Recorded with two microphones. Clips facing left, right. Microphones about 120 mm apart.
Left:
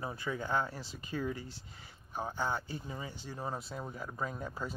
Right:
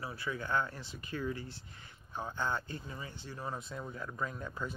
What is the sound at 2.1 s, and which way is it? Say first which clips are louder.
Speech: left 1 dB; 15° left (ahead or behind).